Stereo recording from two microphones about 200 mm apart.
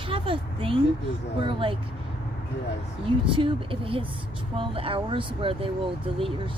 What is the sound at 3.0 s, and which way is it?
A woman's voice, 25° right (ahead or behind).